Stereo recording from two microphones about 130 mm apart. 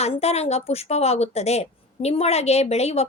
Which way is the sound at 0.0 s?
55° left (ahead or behind).